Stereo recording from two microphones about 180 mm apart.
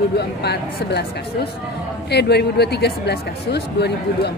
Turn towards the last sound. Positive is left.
turn(degrees=65)  # may be behind; listen again after turning